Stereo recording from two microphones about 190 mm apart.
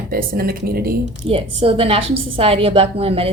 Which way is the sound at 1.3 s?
30° right (ahead or behind).